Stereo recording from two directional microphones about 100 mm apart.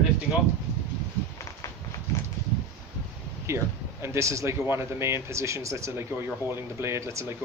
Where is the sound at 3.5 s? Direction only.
30° right (ahead or behind).